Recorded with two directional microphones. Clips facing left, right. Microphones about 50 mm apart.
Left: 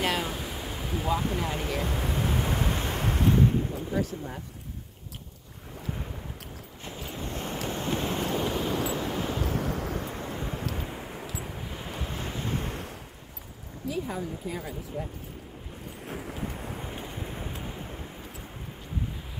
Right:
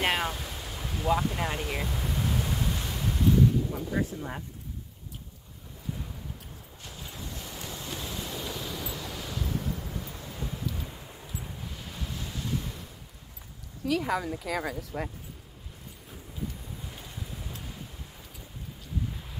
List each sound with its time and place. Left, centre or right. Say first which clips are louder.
0.0 s a sound: right 1 dB; right
0.3 s a sound: left 3 dB; centre
1.8 s ocean: left 3 dB; left
3.9 s speech: left 1 dB; right
6.8 s boat: left 6 dB; left
7.6 s waves: left 9 dB; left
10.8 s vehicle: left 6 dB; left
11.4 s waves: left 4 dB; left
13.8 s speech: right 4 dB; right
16.1 s a sound: left 5 dB; left
16.4 s wind: left 5 dB; left
16.8 s boat: left 6 dB; left
17.5 s waves: left 5 dB; left